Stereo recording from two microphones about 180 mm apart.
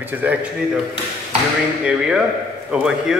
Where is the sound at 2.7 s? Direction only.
5° right (ahead or behind).